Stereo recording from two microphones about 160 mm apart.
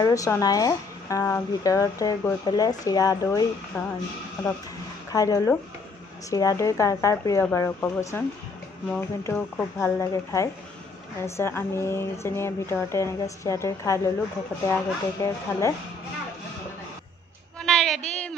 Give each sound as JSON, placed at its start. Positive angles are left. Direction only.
{"t": 0.0, "sound": "speech", "side_deg": 20}
{"t": 5.1, "sound": "speech", "side_deg": 20}
{"t": 9.2, "sound": "speech", "side_deg": 15}
{"t": 17.6, "sound": "child singing", "side_deg": 5}